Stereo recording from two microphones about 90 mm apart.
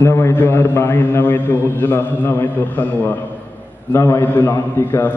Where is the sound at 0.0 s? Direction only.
25° left (ahead or behind).